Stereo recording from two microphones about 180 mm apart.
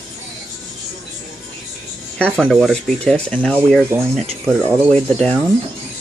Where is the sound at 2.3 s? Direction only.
Centre (ahead or behind).